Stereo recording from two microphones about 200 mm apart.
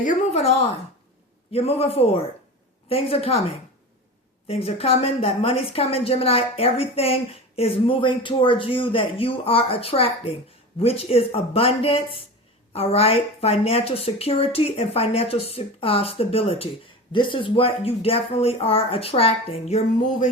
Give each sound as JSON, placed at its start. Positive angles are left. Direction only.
{"t": 0.0, "sound": "speech", "side_deg": 40}